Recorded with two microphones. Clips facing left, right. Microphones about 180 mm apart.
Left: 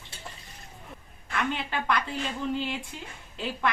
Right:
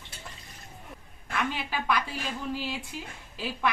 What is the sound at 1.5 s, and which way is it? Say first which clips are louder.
Speech: left 1 dB; 5° right (ahead or behind).